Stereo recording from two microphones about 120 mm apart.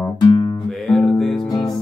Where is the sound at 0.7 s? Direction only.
Centre (ahead or behind).